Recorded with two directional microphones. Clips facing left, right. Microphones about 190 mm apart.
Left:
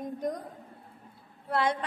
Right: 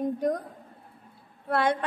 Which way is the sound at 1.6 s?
60° right (ahead or behind).